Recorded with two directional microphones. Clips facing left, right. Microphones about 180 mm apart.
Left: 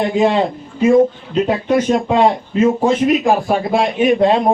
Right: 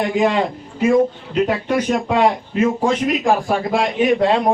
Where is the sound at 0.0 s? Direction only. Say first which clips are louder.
Left 3 dB; 30° left (ahead or behind).